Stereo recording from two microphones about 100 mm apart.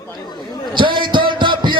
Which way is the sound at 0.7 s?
55° right (ahead or behind).